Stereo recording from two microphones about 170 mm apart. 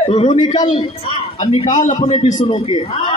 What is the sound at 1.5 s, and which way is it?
Speech, 45° left (ahead or behind).